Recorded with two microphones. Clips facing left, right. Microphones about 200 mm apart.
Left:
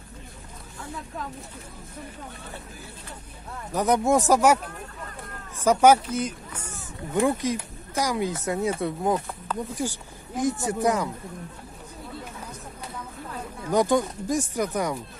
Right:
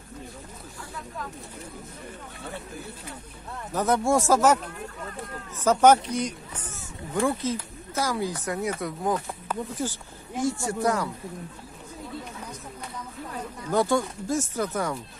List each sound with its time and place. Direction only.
3.7 s speech: 15° left (ahead or behind)
5.6 s speech: 10° left (ahead or behind)
6.7 s speech: 15° left (ahead or behind)
9.8 s speech: 15° left (ahead or behind)
13.7 s speech: 15° left (ahead or behind)